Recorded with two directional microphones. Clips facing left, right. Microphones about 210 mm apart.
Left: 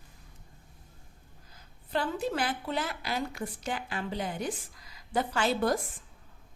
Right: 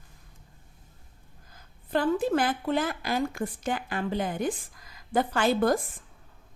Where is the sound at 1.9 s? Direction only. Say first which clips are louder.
Right 6 dB; 50° right (ahead or behind).